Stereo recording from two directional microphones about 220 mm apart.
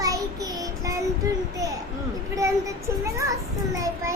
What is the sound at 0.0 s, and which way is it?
Child singing, 15° right (ahead or behind).